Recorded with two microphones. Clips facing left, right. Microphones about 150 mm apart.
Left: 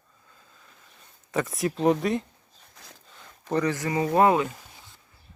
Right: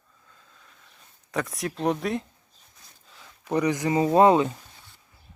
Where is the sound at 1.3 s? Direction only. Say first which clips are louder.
Left 3 dB; centre (ahead or behind).